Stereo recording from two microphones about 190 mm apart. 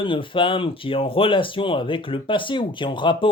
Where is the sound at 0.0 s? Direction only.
25° left (ahead or behind).